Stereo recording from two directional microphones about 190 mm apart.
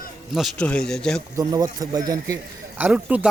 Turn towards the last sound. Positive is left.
turn(degrees=-5)  # may be behind; listen again after turning